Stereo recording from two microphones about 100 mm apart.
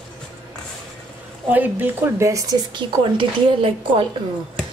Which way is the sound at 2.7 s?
60° right (ahead or behind).